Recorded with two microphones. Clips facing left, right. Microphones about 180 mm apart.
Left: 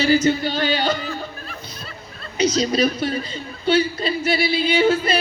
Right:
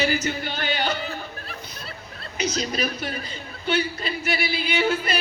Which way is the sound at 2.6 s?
30° left (ahead or behind).